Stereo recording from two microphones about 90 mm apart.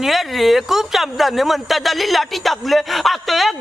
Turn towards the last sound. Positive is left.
turn(degrees=0)  # may be behind; listen again after turning